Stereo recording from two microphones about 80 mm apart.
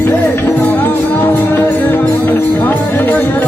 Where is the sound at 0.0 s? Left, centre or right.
Left.